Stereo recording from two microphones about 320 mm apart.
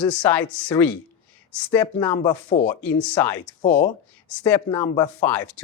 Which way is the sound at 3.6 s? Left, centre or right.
Centre.